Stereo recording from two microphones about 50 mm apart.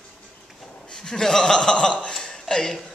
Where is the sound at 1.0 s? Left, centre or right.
Centre.